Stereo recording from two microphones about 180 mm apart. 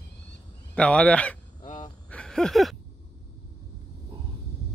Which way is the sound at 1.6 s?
40° left (ahead or behind).